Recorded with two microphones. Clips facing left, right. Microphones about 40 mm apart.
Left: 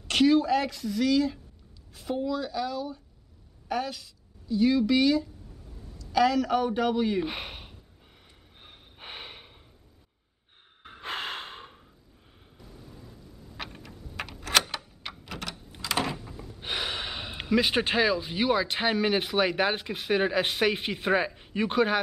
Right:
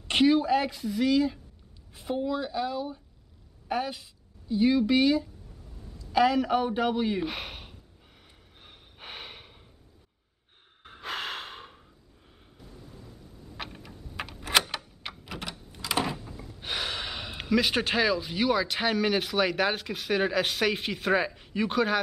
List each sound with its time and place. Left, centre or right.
0.1 s a woman's voice: centre
7.2 s a sound: centre
8.6 s snort: centre
10.8 s snort: centre
13.6 s typing: centre
14.7 s a sound: centre
15.8 s speech: centre